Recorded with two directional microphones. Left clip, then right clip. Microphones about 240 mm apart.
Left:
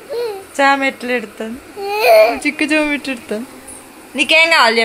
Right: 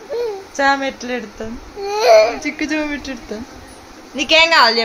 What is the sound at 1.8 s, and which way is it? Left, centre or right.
Speech, centre.